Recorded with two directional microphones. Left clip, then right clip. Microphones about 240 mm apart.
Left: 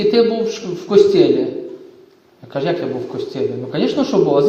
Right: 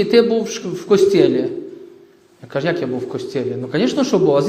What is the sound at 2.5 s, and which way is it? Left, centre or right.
A man's voice, right.